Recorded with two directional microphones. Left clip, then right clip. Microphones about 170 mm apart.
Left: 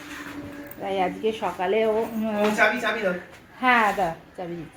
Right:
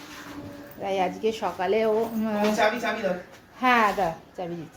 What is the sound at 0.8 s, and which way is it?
Speech, centre (ahead or behind).